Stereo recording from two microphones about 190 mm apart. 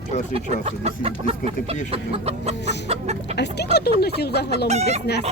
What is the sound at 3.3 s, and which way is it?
Speech, 60° left (ahead or behind).